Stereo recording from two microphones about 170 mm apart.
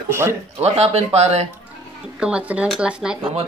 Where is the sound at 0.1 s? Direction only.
15° right (ahead or behind).